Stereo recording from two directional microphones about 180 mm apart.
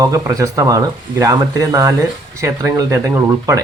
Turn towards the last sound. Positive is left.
turn(degrees=-15)  # may be behind; listen again after turning